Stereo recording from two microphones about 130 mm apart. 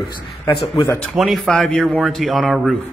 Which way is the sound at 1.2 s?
Centre (ahead or behind).